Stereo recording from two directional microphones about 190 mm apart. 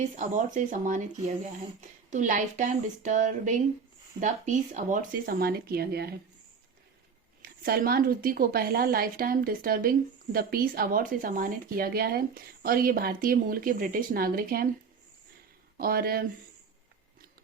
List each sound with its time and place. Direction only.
0.2 s speech: 40° right (ahead or behind)
7.4 s speech: 50° right (ahead or behind)
15.8 s speech: 50° right (ahead or behind)